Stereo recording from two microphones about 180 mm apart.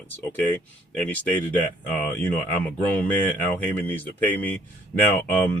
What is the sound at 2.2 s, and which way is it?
Speech, 10° left (ahead or behind).